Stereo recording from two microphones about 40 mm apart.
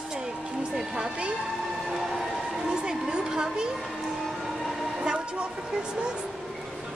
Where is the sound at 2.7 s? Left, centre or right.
Right.